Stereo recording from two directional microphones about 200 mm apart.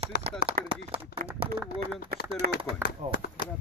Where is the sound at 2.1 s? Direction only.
50° right (ahead or behind).